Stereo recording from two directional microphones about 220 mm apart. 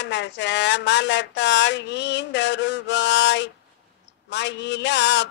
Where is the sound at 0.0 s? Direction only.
55° left (ahead or behind).